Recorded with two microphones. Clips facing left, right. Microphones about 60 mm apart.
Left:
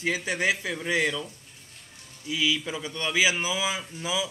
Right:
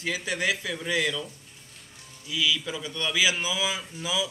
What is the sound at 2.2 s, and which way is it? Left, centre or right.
A man's voice, left.